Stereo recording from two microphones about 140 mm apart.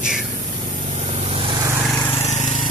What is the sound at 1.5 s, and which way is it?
Vehicle, 25° right (ahead or behind).